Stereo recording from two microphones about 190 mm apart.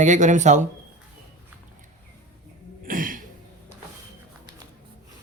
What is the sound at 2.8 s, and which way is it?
Throat clearing, 45° right (ahead or behind).